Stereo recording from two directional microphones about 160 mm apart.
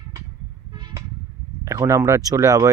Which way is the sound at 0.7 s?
25° right (ahead or behind).